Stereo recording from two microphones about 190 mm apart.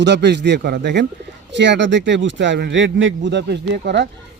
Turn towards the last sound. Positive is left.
turn(degrees=-65)  # may be behind; listen again after turning